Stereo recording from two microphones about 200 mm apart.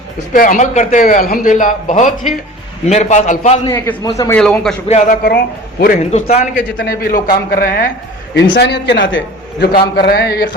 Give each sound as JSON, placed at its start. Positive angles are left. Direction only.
{"t": 0.3, "sound": "a man's voice", "side_deg": 40}
{"t": 3.6, "sound": "a man's voice", "side_deg": 15}
{"t": 4.4, "sound": "a man's voice", "side_deg": 5}
{"t": 4.9, "sound": "a man's voice", "side_deg": 35}
{"t": 6.7, "sound": "a man's voice", "side_deg": 65}
{"t": 6.9, "sound": "a man's voice", "side_deg": 45}
{"t": 8.5, "sound": "a man's voice", "side_deg": 55}
{"t": 9.7, "sound": "a man's voice", "side_deg": 50}